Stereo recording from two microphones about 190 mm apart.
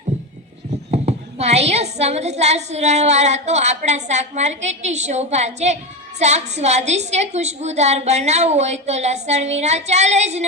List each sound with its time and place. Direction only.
0.9 s a woman's voice: 35° right (ahead or behind)